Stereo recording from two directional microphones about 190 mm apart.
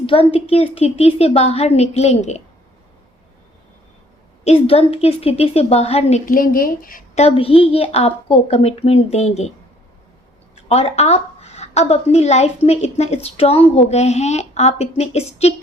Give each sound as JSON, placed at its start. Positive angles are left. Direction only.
{"t": 0.0, "sound": "a woman's voice", "side_deg": 30}
{"t": 4.4, "sound": "a woman's voice", "side_deg": 30}
{"t": 7.2, "sound": "a woman's voice", "side_deg": 30}
{"t": 10.5, "sound": "a woman's voice", "side_deg": 35}